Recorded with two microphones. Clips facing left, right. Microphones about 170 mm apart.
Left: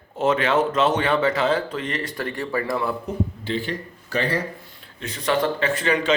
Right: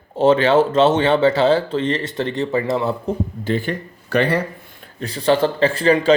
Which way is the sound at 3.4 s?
50° right (ahead or behind).